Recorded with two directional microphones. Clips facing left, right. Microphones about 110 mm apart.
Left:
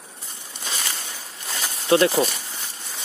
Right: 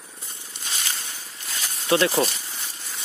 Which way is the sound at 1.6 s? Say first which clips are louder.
Left 3 dB; 30° left (ahead or behind).